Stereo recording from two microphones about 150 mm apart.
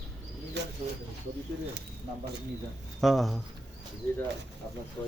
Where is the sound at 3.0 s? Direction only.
Centre (ahead or behind).